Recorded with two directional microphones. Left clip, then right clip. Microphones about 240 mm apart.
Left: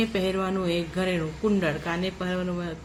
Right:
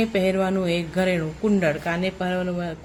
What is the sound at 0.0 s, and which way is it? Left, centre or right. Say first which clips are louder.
Speech: right 5 dB; right.